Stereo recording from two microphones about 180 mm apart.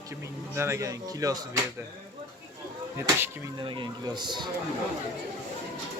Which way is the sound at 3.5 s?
25° right (ahead or behind).